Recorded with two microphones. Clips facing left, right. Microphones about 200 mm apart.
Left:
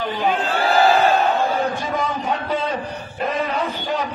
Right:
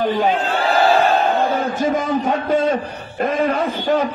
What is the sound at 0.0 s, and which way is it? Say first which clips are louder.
Speech: right 5 dB; 45° right (ahead or behind).